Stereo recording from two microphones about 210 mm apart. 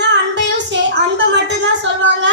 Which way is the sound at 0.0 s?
55° right (ahead or behind).